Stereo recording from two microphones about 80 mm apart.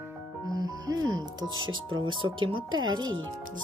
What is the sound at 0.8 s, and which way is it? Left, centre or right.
Speech, right.